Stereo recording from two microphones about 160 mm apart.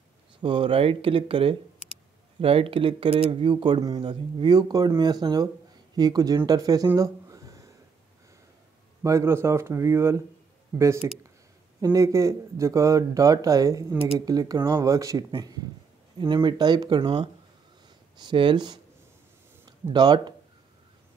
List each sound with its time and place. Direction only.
0.4 s speech: 30° right (ahead or behind)
7.0 s a sound: 20° right (ahead or behind)
9.0 s a man's voice: 15° right (ahead or behind)